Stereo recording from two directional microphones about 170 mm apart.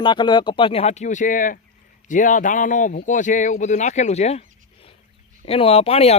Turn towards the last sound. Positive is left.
turn(degrees=35)  # may be behind; listen again after turning